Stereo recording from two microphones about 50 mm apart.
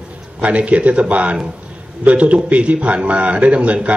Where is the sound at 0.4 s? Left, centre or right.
Right.